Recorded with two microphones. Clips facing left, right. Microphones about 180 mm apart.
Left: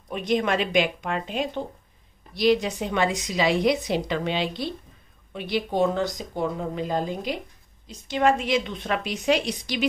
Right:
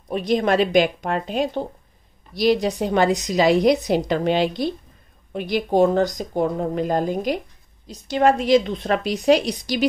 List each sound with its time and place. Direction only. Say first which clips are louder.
0.1 s a woman's voice: right 4 dB; 35° right (ahead or behind)